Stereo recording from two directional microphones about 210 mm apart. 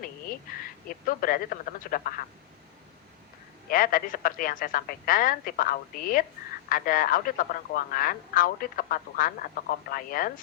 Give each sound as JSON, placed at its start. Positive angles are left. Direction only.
{"t": 0.0, "sound": "a woman's voice", "side_deg": 45}
{"t": 3.7, "sound": "speech", "side_deg": 40}